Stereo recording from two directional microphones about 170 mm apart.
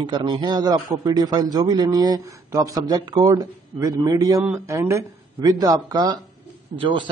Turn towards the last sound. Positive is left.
turn(degrees=-30)  # may be behind; listen again after turning